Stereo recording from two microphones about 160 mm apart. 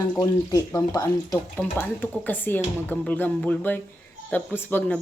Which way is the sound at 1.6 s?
10° left (ahead or behind).